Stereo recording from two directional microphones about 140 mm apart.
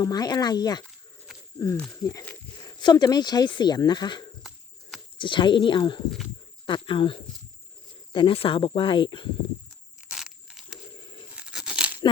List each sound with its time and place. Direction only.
0.0 s speech: 30° left (ahead or behind)
6.1 s speech: centre (ahead or behind)
6.7 s speech: 35° left (ahead or behind)
10.1 s crushing: 5° right (ahead or behind)
10.9 s a sound: 35° left (ahead or behind)
11.3 s tearing: 5° right (ahead or behind)